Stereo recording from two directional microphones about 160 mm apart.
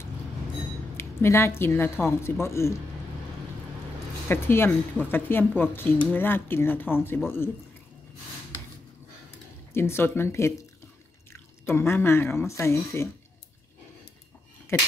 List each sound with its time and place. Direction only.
0.9 s speech: 15° left (ahead or behind)
4.3 s speech: 15° left (ahead or behind)
9.8 s speech: 15° left (ahead or behind)